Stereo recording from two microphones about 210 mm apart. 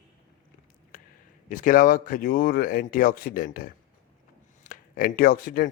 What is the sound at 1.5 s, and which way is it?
Speech, 40° left (ahead or behind).